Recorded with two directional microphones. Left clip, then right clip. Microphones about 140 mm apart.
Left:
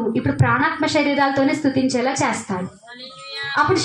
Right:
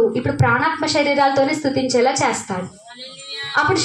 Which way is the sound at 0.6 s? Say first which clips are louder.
Right 1 dB; 30° right (ahead or behind).